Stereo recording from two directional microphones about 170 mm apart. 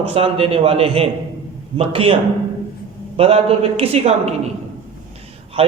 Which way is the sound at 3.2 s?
35° right (ahead or behind).